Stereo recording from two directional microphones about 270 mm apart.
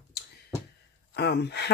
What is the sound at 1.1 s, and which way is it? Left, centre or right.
Speech, left.